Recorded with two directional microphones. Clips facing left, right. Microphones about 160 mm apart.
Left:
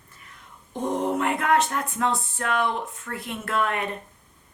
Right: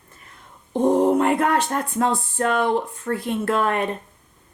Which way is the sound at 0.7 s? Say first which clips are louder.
Right 8 dB; 30° right (ahead or behind).